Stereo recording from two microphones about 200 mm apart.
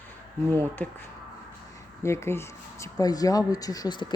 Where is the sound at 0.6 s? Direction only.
10° left (ahead or behind).